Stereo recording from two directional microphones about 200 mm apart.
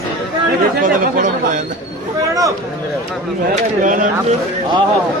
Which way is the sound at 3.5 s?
40° right (ahead or behind).